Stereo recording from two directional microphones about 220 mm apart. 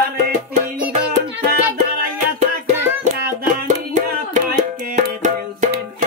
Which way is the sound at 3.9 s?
35° right (ahead or behind).